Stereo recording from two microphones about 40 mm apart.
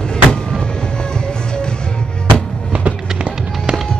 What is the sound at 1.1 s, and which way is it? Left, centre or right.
Music, left.